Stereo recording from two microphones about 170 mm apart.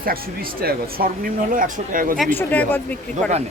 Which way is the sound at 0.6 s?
65° right (ahead or behind).